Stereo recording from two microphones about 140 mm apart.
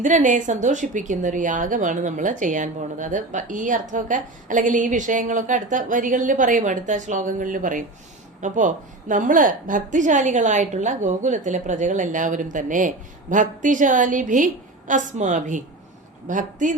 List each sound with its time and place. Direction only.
0.0 s speech: 65° right (ahead or behind)